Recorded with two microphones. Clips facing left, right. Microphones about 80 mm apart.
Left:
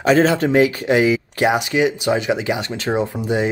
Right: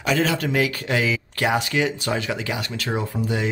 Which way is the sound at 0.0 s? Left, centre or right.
Left.